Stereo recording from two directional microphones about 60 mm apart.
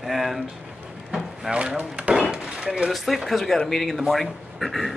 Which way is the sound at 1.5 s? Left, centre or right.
Centre.